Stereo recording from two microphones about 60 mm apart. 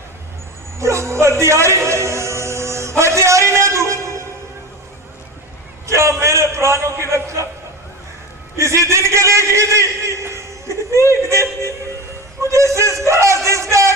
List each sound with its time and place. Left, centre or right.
0.8 s a sound: right
5.8 s a man's voice: right
8.5 s a man's voice: right
11.1 s music: right